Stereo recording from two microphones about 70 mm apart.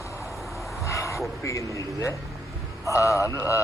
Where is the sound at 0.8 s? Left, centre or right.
Left.